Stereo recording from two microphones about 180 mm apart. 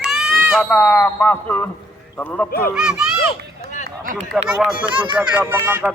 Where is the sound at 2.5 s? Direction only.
55° left (ahead or behind).